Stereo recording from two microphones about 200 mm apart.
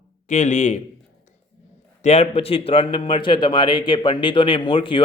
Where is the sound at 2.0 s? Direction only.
35° left (ahead or behind).